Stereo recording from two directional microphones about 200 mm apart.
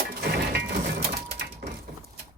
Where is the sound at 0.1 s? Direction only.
50° right (ahead or behind).